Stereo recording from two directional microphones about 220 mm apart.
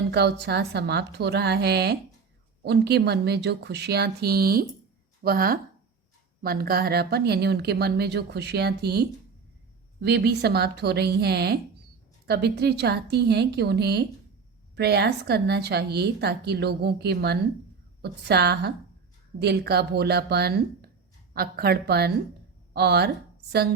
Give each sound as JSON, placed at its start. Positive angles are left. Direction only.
{"t": 0.1, "sound": "speech", "side_deg": -50}